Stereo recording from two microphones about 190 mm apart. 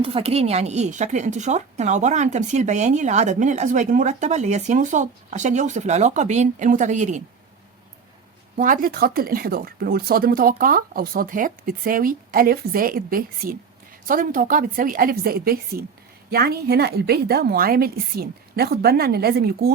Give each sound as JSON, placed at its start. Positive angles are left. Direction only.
{"t": 0.0, "sound": "a woman's voice", "side_deg": -30}
{"t": 8.5, "sound": "a woman's voice", "side_deg": -45}